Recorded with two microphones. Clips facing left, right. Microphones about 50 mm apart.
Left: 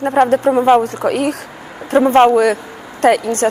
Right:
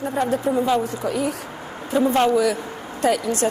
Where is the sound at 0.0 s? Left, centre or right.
Left.